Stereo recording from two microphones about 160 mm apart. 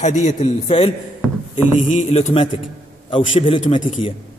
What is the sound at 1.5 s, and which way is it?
A man's voice, 50° left (ahead or behind).